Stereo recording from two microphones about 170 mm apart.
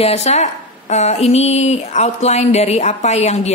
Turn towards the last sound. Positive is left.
turn(degrees=40)  # may be behind; listen again after turning